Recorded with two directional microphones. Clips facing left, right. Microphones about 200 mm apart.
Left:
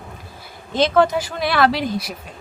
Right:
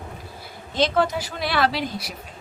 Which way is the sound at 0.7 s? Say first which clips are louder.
Left 5 dB; 50° left (ahead or behind).